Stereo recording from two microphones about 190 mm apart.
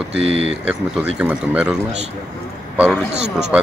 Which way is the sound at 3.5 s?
5° right (ahead or behind).